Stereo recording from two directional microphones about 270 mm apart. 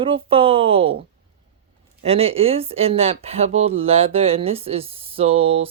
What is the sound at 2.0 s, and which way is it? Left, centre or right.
Speech, right.